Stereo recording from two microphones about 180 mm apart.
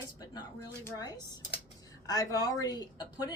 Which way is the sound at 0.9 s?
20° left (ahead or behind).